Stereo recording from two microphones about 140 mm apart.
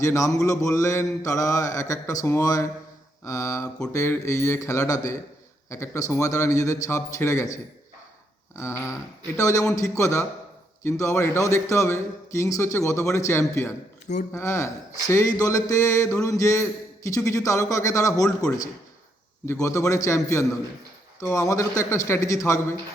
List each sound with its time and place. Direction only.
0.0 s a man's voice: 20° left (ahead or behind)
8.5 s a man's voice: 20° left (ahead or behind)
19.5 s a man's voice: 20° left (ahead or behind)